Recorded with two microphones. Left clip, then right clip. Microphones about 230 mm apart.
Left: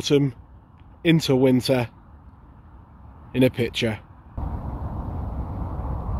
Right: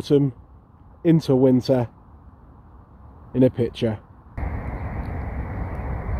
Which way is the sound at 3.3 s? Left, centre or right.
Centre.